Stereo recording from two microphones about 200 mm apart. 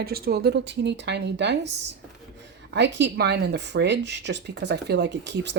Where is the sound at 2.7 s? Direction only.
60° right (ahead or behind).